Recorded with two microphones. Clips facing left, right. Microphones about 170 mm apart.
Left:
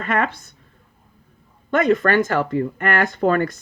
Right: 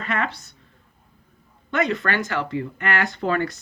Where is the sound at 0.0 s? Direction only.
50° left (ahead or behind).